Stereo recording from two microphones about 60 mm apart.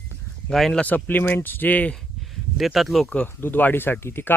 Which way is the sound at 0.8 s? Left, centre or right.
Left.